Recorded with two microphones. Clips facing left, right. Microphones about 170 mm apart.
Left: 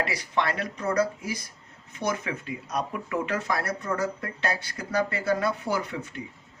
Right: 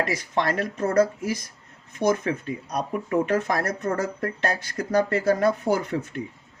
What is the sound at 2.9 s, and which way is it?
Speech, 45° right (ahead or behind).